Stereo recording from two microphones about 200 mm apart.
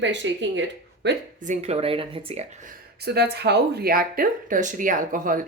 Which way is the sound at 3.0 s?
55° right (ahead or behind).